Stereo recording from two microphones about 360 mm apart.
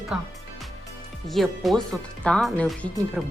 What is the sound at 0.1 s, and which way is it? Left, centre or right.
Speech, centre.